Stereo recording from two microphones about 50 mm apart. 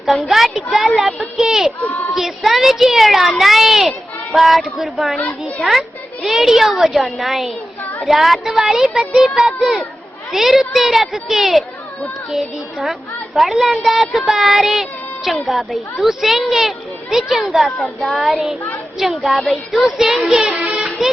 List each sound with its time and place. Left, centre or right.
0.0 s a woman's voice: centre
6.2 s a woman's voice: centre
20.6 s a sound: right